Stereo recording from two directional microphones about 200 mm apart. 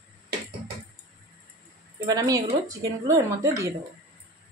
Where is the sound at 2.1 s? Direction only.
15° right (ahead or behind).